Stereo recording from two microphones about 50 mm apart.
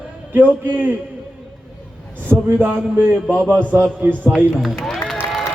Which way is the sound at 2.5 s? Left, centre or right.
Right.